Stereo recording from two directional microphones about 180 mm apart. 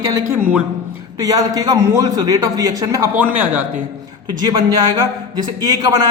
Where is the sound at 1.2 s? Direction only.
20° right (ahead or behind).